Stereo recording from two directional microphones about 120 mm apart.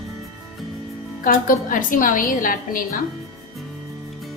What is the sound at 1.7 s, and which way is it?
Speech, 90° left.